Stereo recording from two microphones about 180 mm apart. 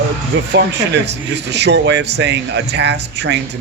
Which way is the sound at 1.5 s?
70° right (ahead or behind).